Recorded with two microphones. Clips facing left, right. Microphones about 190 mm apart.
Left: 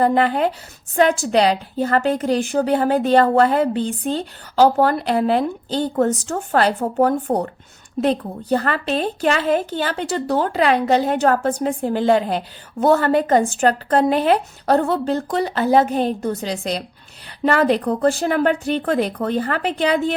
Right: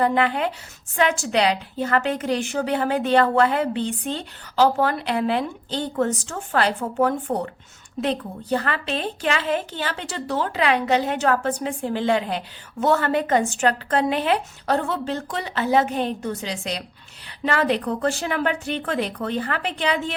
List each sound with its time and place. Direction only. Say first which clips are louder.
0.0 s a woman's voice: left 4 dB; 35° left (ahead or behind)